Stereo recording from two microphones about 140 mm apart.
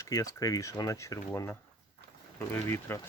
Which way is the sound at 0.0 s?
25° left (ahead or behind).